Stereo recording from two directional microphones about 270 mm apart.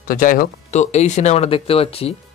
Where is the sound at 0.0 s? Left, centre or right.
Left.